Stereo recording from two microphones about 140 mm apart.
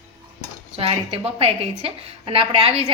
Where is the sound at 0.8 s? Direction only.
45° right (ahead or behind).